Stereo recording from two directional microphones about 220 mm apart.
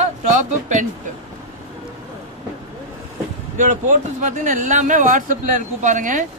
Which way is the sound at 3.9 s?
35° right (ahead or behind).